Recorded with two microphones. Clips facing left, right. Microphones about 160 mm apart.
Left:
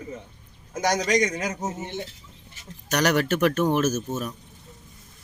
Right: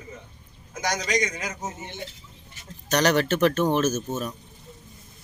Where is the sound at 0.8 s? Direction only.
50° left (ahead or behind).